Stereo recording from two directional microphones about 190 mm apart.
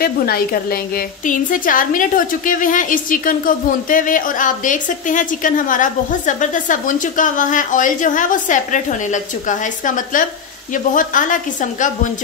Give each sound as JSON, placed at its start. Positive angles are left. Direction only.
{"t": 0.0, "sound": "a woman's voice", "side_deg": 50}